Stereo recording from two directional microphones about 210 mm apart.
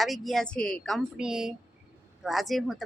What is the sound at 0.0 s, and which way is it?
A woman's voice, centre (ahead or behind).